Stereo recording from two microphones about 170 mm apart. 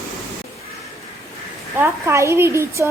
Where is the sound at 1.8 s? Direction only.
15° right (ahead or behind).